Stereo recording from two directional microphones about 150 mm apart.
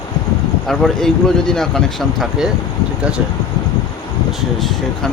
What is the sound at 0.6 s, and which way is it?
Speech, 5° left (ahead or behind).